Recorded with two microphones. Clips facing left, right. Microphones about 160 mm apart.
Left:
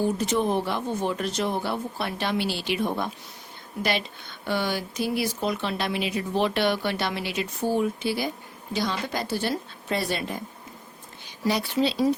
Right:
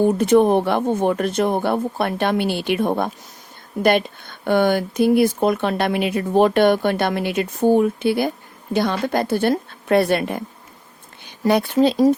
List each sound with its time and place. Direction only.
0.0 s speech: 55° right (ahead or behind)